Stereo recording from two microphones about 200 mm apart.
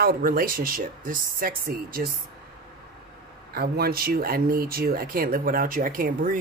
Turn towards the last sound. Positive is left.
turn(degrees=-45)  # may be behind; listen again after turning